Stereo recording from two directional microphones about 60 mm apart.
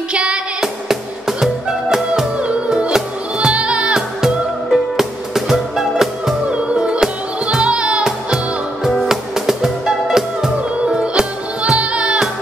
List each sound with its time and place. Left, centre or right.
0.1 s music: centre
0.8 s music: centre
2.3 s music: centre
4.2 s music: centre
6.5 s music: centre